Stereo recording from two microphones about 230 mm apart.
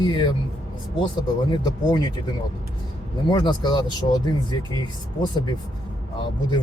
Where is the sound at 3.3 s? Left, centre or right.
Centre.